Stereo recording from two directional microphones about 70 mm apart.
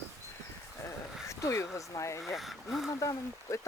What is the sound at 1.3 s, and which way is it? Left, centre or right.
Speech, left.